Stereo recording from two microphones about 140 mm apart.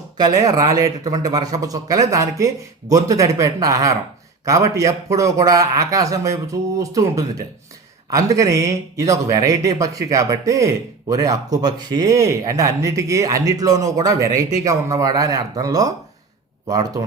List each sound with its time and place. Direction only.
0.2 s speech: 25° right (ahead or behind)